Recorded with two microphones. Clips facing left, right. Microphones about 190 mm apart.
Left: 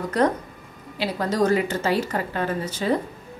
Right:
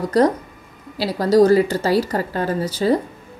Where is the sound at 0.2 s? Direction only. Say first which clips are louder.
Right 5 dB; 35° right (ahead or behind).